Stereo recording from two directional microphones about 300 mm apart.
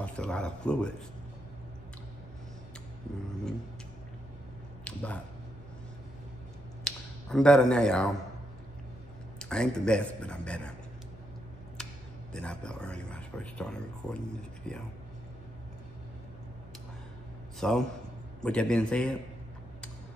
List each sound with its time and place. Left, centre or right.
0.0 s speech: centre
4.8 s speech: centre
6.8 s a sound: centre
9.4 s a man's voice: centre
11.8 s a man's voice: centre
17.6 s a man's voice: centre